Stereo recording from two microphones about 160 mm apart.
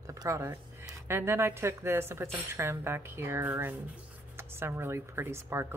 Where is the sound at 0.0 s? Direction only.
20° right (ahead or behind).